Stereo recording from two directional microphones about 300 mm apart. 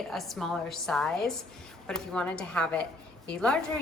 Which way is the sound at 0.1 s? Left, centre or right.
Centre.